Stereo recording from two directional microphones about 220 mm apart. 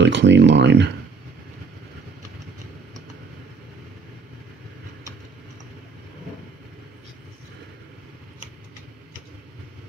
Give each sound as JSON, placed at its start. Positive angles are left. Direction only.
{"t": 0.0, "sound": "speech", "side_deg": -55}